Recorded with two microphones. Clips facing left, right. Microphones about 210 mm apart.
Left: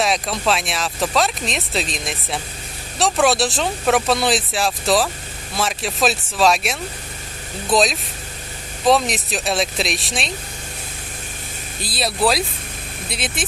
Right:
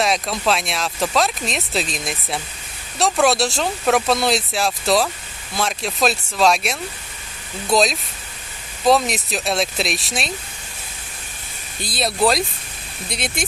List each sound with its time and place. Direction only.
0.0 s speech: centre (ahead or behind)
11.8 s speech: centre (ahead or behind)